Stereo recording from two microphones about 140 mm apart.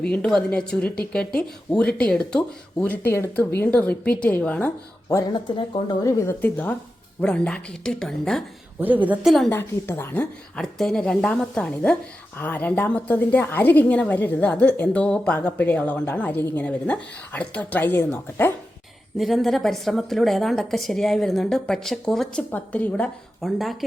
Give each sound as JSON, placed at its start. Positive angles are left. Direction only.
{"t": 0.0, "sound": "a woman's voice", "side_deg": 5}
{"t": 5.0, "sound": "speech", "side_deg": 20}
{"t": 5.5, "sound": "a woman's voice", "side_deg": 35}
{"t": 8.8, "sound": "a woman's voice", "side_deg": -10}
{"t": 9.5, "sound": "a woman's voice", "side_deg": 15}
{"t": 19.1, "sound": "a woman's voice", "side_deg": 0}